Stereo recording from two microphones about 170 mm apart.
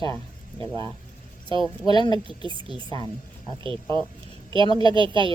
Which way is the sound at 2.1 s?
30° right (ahead or behind).